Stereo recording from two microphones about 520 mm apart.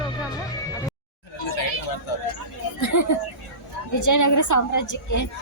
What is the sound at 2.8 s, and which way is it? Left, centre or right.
Children playing, left.